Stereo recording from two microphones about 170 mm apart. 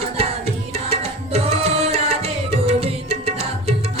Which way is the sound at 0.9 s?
35° right (ahead or behind).